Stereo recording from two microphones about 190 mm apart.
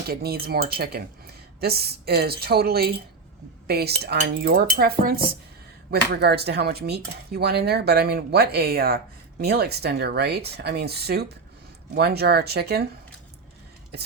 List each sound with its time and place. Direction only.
0.1 s speech: 55° right (ahead or behind)
3.7 s cutlery: 55° right (ahead or behind)
5.9 s speech: 60° right (ahead or behind)